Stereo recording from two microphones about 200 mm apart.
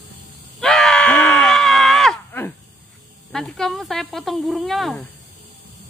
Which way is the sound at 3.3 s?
Centre (ahead or behind).